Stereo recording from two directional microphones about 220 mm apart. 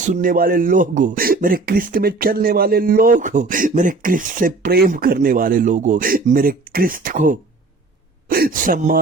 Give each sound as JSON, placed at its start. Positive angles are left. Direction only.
{"t": 0.0, "sound": "speech", "side_deg": -35}